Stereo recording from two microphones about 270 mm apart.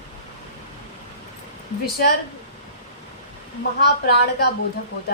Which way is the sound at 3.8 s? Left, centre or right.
Left.